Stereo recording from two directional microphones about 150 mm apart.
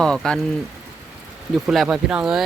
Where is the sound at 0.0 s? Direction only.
5° left (ahead or behind).